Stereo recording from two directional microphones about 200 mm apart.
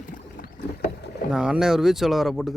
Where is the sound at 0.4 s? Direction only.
45° left (ahead or behind).